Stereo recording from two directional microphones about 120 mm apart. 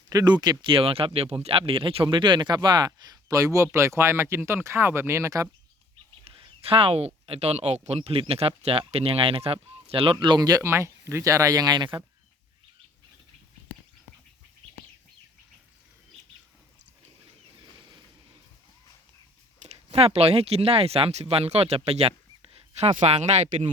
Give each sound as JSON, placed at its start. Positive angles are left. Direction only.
{"t": 0.1, "sound": "speech", "side_deg": -30}
{"t": 6.2, "sound": "a sound", "side_deg": -55}
{"t": 7.3, "sound": "speech", "side_deg": -60}
{"t": 19.6, "sound": "speech", "side_deg": -55}